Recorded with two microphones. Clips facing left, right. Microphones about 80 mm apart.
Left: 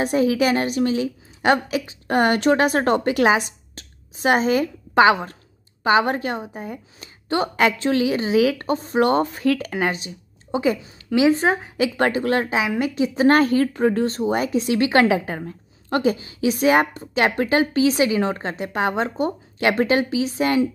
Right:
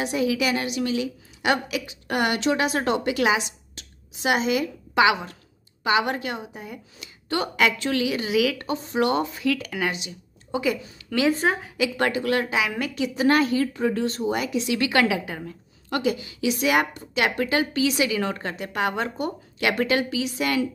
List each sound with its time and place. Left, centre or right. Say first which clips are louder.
0.0 s a woman's voice: left 5 dB; left
11.1 s speech: left 5 dB; centre
11.7 s a woman's voice: left 3 dB; left